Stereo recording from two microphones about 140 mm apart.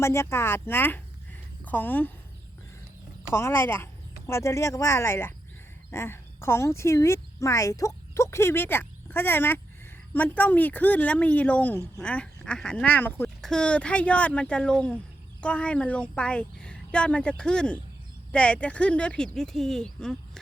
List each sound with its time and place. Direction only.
0.0 s speech: 20° left (ahead or behind)
3.3 s speech: 15° left (ahead or behind)
13.2 s speech: 5° left (ahead or behind)